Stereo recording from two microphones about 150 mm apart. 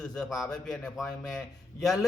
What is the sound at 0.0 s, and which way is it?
A man's voice, 5° left (ahead or behind).